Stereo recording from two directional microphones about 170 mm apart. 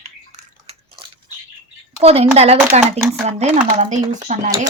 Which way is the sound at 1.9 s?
35° right (ahead or behind).